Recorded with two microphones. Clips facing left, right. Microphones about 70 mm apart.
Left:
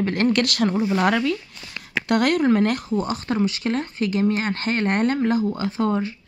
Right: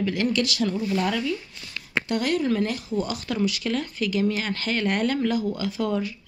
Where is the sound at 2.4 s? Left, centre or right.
Left.